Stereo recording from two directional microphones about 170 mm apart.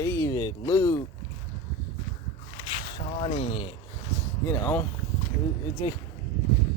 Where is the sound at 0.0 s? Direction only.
20° left (ahead or behind).